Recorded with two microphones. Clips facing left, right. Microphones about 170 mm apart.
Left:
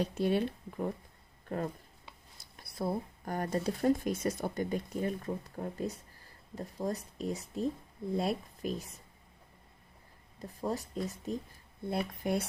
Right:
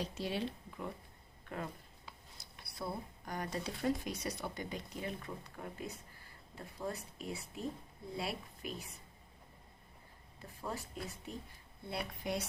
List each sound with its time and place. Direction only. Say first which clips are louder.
0.0 s speech: left 8 dB; 55° left (ahead or behind)
10.4 s speech: left 8 dB; 40° left (ahead or behind)